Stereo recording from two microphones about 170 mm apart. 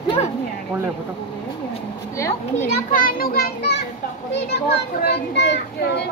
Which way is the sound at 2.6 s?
55° left (ahead or behind).